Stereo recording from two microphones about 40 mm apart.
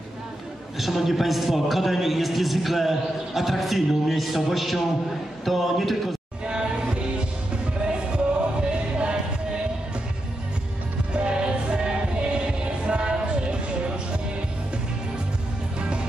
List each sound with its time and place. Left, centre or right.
0.7 s a man's voice: centre
6.4 s music: right
8.5 s music: right
11.1 s music: right